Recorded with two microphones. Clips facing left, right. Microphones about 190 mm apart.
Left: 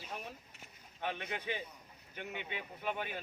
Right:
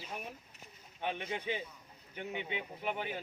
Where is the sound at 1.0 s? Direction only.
20° right (ahead or behind).